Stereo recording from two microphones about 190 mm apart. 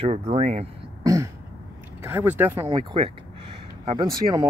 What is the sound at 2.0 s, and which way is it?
Speech, 10° right (ahead or behind).